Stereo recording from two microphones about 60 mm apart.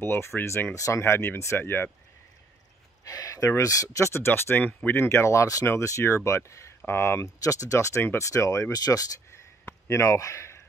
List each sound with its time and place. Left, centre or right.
0.0 s speech: left
0.7 s speech: left
3.1 s speech: left
4.1 s speech: left
7.4 s speech: left
9.8 s speech: left